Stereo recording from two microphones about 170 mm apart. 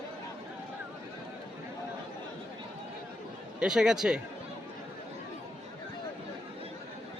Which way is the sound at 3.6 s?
5° right (ahead or behind).